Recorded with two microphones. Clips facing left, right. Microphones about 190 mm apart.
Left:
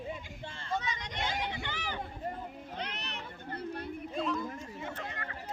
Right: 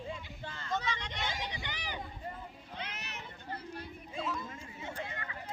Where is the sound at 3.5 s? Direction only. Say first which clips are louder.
Left 5 dB; 60° left (ahead or behind).